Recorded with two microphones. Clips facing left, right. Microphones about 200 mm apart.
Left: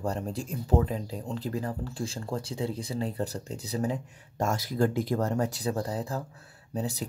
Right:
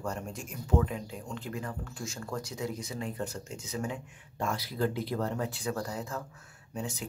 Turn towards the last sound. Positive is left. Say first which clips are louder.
# left 5 dB
turn(degrees=35)  # may be behind; listen again after turning